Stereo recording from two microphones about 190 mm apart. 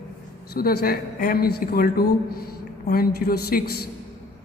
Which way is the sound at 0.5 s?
50° left (ahead or behind).